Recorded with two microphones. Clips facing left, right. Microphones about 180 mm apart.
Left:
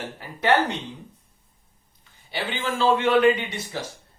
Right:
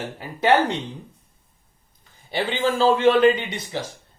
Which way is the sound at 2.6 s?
35° right (ahead or behind).